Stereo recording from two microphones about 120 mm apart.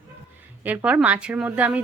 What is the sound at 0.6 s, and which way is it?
Speech, 10° right (ahead or behind).